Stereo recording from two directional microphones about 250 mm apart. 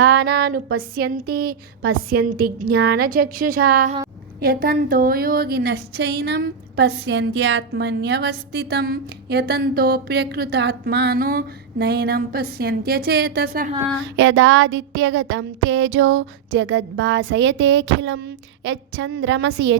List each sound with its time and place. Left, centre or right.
0.0 s a woman's voice: right